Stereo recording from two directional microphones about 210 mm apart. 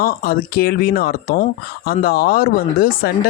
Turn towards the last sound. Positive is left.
turn(degrees=45)  # may be behind; listen again after turning